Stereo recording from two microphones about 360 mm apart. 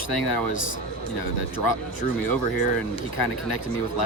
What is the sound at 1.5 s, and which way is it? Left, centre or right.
Speech, left.